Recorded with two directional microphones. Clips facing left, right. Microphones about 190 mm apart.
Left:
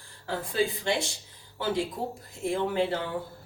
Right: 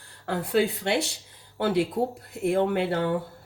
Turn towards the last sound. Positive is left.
turn(degrees=-60)  # may be behind; listen again after turning